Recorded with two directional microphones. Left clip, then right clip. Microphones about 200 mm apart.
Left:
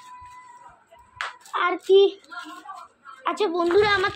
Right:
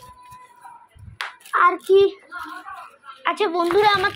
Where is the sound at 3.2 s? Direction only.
10° left (ahead or behind).